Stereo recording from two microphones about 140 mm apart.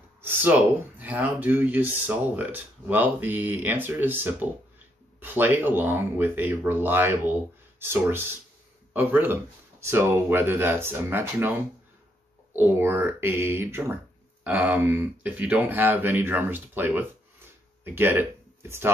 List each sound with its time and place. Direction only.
0.2 s speech: 15° right (ahead or behind)